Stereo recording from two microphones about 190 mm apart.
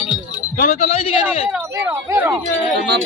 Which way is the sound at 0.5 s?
40° left (ahead or behind).